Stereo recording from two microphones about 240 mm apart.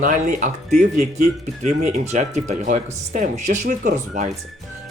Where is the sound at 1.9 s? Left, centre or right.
Right.